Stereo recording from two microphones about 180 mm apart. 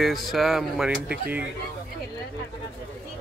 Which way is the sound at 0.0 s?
Centre (ahead or behind).